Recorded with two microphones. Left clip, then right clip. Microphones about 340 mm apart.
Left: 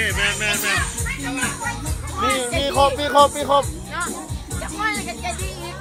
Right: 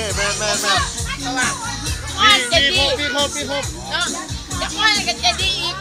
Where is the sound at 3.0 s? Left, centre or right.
Left.